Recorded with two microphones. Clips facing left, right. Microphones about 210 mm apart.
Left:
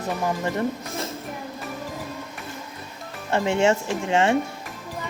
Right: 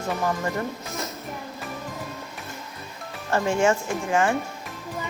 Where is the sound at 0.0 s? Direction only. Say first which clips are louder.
Even; 20° left (ahead or behind).